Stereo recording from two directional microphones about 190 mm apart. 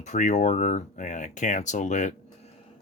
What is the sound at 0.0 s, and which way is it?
Speech, 40° left (ahead or behind).